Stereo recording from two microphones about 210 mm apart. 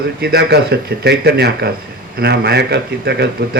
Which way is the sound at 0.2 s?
50° right (ahead or behind).